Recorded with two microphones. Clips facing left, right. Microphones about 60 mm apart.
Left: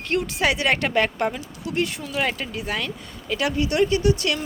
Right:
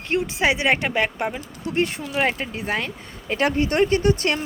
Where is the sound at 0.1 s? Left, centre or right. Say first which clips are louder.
Right 1 dB; right.